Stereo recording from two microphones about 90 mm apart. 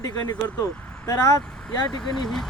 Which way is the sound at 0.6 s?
40° left (ahead or behind).